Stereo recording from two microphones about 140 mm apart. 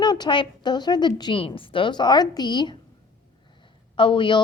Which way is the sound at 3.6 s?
35° left (ahead or behind).